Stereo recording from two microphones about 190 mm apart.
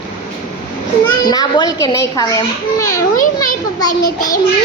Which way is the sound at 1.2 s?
20° left (ahead or behind).